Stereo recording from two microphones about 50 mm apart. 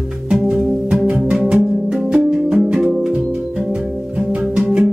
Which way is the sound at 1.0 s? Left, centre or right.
Right.